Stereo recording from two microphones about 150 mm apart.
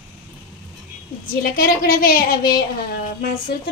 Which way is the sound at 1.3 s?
75° left (ahead or behind).